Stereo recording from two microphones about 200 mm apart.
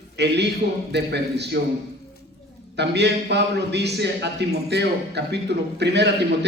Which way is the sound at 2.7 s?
55° right (ahead or behind).